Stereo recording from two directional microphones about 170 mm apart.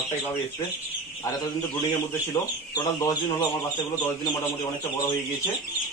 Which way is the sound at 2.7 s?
20° left (ahead or behind).